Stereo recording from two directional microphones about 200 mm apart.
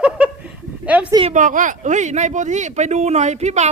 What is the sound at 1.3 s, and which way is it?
Speech, 40° right (ahead or behind).